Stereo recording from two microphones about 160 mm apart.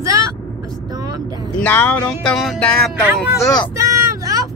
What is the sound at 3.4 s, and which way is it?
Speech, 25° left (ahead or behind).